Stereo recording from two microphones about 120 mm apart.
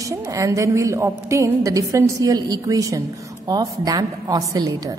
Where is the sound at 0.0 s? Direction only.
30° right (ahead or behind).